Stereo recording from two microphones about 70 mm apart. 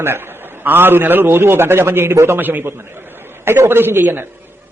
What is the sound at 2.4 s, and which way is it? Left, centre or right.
A man's voice, right.